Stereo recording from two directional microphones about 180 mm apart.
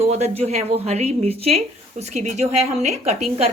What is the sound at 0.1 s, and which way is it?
A woman's voice, 35° right (ahead or behind).